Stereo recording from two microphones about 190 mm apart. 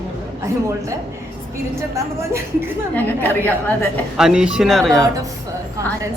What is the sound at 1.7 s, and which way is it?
Speech, 15° right (ahead or behind).